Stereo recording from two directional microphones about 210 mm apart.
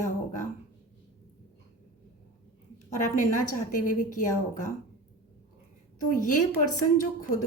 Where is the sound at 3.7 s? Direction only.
35° left (ahead or behind).